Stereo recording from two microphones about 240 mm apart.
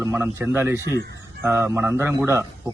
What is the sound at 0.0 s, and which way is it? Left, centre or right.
Speech, centre.